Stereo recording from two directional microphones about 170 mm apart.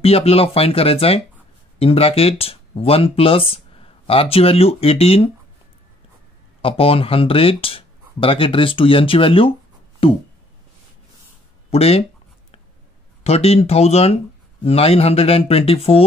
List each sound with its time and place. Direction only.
0.0 s speech: 35° left (ahead or behind)
6.6 s speech: 35° left (ahead or behind)
10.0 s a sound: 35° left (ahead or behind)
11.7 s speech: 35° left (ahead or behind)
13.2 s speech: 35° left (ahead or behind)